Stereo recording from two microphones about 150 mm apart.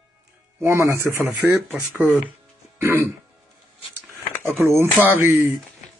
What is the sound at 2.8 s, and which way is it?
Speech, 20° right (ahead or behind).